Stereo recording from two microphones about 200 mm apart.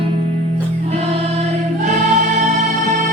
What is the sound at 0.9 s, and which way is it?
Choir, 35° right (ahead or behind).